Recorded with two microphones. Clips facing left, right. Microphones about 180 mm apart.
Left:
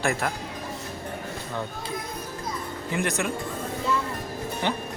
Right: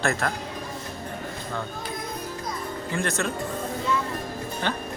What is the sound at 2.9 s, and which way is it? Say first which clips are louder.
Speech: left 1 dB; 15° left (ahead or behind).